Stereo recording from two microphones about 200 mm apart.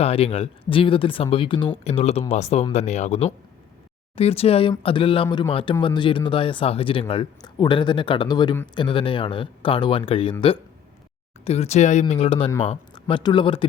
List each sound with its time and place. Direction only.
0.0 s speech: 30° left (ahead or behind)
11.4 s speech: 30° left (ahead or behind)